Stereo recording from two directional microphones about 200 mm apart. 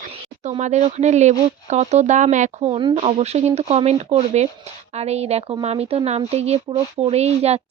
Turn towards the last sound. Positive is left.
turn(degrees=-30)  # may be behind; listen again after turning